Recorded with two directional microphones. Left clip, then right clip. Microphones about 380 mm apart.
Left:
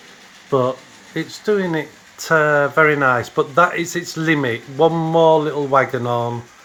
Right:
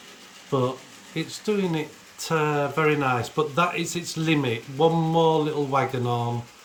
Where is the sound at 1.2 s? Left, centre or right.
Centre.